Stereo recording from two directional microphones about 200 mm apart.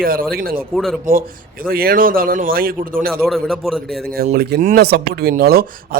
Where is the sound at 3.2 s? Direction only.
Centre (ahead or behind).